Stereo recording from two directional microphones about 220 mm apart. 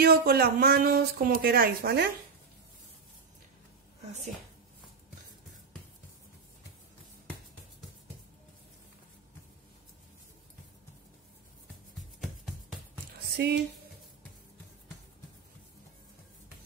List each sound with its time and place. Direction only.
0.0 s speech: 45° right (ahead or behind)
13.4 s speech: 50° right (ahead or behind)